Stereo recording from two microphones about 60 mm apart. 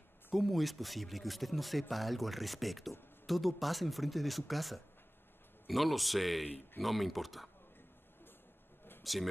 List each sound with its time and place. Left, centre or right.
0.3 s speech: centre
9.0 s speech: centre